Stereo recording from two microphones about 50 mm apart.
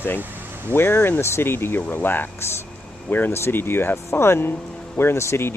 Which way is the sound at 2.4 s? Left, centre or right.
Left.